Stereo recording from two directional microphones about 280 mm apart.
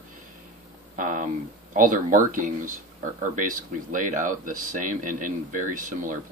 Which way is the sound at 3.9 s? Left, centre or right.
Right.